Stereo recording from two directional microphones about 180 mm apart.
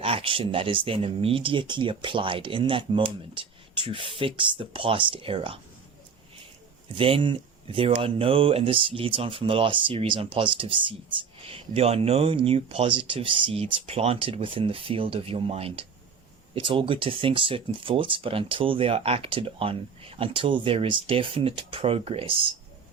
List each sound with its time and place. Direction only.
0.0 s speech: 30° right (ahead or behind)
6.9 s speech: 30° right (ahead or behind)